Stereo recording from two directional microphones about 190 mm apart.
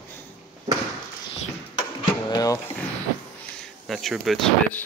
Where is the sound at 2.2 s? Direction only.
20° left (ahead or behind).